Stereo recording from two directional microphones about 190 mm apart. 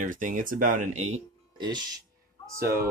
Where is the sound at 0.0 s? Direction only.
45° right (ahead or behind).